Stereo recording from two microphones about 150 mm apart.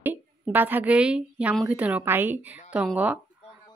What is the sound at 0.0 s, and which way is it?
A woman's voice, 10° right (ahead or behind).